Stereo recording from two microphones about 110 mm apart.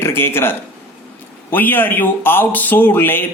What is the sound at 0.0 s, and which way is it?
Speech, 20° left (ahead or behind).